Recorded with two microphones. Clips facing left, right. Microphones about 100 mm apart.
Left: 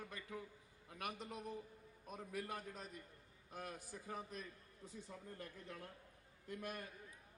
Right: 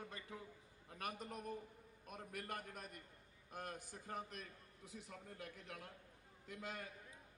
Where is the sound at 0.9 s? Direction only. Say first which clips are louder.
Even; 40° right (ahead or behind).